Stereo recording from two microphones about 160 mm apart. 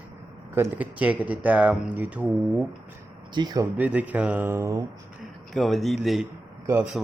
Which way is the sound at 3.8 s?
10° right (ahead or behind).